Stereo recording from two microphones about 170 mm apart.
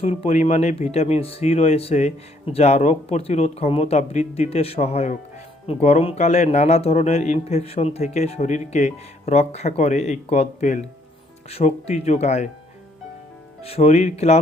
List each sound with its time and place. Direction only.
0.0 s speech: 35° left (ahead or behind)
13.6 s speech: 35° left (ahead or behind)